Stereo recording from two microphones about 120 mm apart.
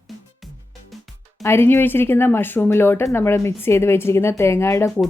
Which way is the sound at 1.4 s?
20° left (ahead or behind).